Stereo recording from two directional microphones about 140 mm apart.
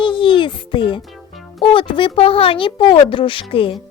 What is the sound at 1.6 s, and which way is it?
Speech, 35° left (ahead or behind).